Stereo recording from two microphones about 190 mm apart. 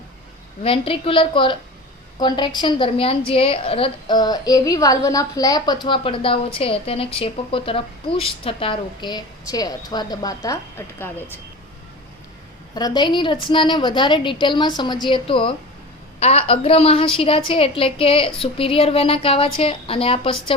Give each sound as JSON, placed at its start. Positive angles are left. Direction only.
{"t": 0.6, "sound": "a woman's voice", "side_deg": 30}
{"t": 12.7, "sound": "a woman's voice", "side_deg": 20}